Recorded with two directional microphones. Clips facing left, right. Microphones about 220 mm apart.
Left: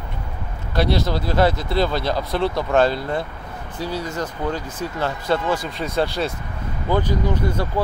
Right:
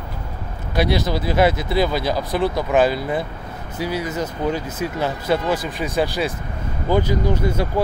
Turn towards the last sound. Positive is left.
turn(degrees=-10)  # may be behind; listen again after turning